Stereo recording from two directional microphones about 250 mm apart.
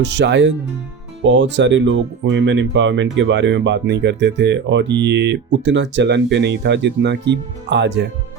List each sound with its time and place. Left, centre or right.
0.0 s speech: right